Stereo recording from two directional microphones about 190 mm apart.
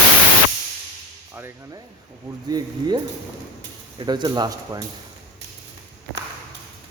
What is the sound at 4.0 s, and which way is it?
Speech, 25° right (ahead or behind).